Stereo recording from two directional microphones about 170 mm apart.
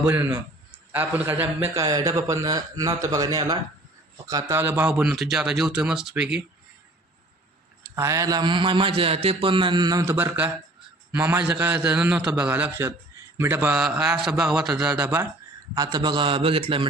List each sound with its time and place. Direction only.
0.0 s a man's voice: 10° right (ahead or behind)
7.9 s a man's voice: 15° right (ahead or behind)
15.7 s a man's voice: 20° right (ahead or behind)